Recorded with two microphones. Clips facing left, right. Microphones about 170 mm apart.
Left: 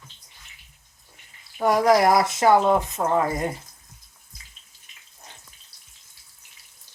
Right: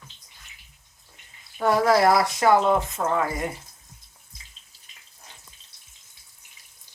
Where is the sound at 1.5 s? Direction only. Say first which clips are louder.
Left 1 dB; 15° left (ahead or behind).